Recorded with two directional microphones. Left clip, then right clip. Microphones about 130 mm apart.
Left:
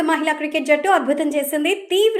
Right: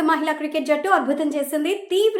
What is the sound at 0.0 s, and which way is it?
A woman's voice, 5° left (ahead or behind).